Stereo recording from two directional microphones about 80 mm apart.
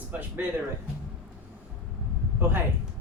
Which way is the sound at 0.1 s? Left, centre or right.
Right.